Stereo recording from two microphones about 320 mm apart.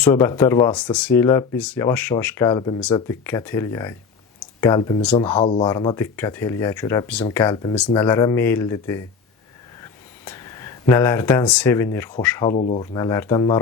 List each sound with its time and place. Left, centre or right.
0.0 s speech: centre
9.8 s a sound: centre
12.2 s speech: centre
12.5 s speech: left
12.8 s speech: centre